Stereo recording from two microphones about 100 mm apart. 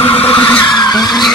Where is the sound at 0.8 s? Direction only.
45° left (ahead or behind).